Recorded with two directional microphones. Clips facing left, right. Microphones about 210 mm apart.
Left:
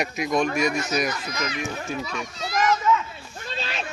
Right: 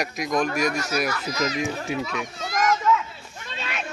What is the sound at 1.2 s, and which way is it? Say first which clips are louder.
Speech: right 4 dB; 40° right (ahead or behind).